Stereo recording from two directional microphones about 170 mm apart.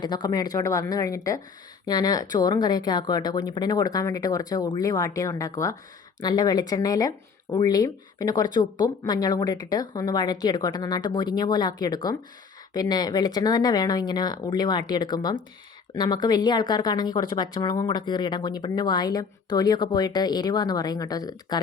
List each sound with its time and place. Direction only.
0.0 s speech: 25° left (ahead or behind)